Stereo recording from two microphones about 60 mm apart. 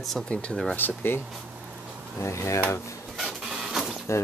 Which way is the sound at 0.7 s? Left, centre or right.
Left.